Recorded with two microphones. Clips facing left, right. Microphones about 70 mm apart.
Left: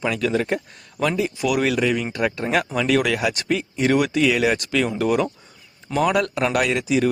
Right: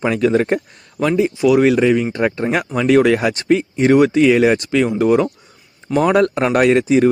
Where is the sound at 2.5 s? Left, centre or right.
Centre.